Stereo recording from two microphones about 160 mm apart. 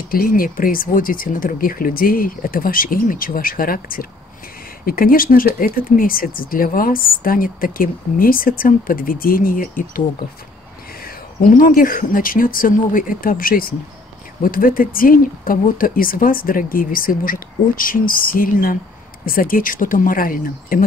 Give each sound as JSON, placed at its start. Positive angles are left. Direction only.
{"t": 0.1, "sound": "speech", "side_deg": 65}
{"t": 11.1, "sound": "speech", "side_deg": 55}